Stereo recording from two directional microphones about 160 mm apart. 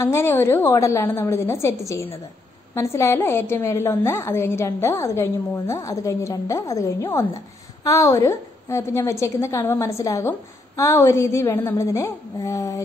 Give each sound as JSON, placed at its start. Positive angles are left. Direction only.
{"t": 0.0, "sound": "a woman's voice", "side_deg": 15}